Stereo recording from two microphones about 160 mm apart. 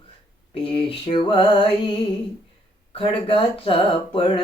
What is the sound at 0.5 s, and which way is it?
Speech, 35° left (ahead or behind).